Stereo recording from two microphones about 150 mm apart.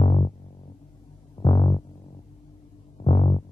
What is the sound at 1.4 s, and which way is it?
Music, 30° left (ahead or behind).